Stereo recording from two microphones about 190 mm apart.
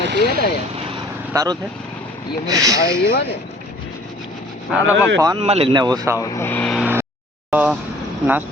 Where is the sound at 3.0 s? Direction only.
60° left (ahead or behind).